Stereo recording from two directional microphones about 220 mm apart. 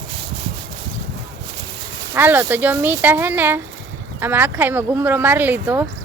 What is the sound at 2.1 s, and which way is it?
Speech, 10° right (ahead or behind).